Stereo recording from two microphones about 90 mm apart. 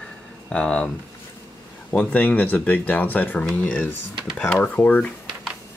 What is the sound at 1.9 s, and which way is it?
Speech, 15° left (ahead or behind).